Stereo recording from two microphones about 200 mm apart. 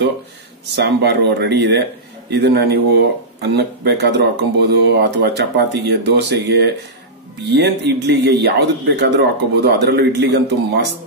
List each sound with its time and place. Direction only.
0.7 s speech: 55° right (ahead or behind)